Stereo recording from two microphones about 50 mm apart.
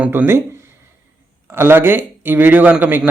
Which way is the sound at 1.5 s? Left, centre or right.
Right.